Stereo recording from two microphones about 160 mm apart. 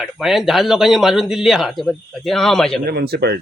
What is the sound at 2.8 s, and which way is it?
Speech, 85° right.